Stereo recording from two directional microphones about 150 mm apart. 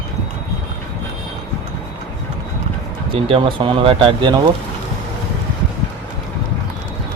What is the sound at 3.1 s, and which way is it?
Speech, 35° right (ahead or behind).